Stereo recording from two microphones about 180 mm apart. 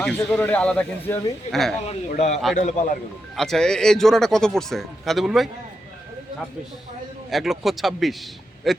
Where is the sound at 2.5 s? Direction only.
45° left (ahead or behind).